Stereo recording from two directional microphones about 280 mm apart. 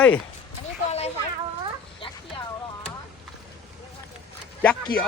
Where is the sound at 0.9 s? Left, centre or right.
Left.